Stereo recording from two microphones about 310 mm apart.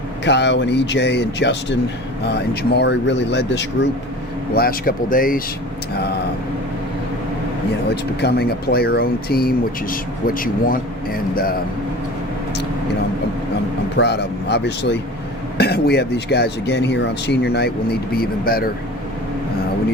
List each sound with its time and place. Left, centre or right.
0.3 s speech: left
8.2 s speech: left
13.9 s speech: left